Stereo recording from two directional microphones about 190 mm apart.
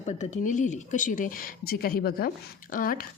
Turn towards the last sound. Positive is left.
turn(degrees=45)  # may be behind; listen again after turning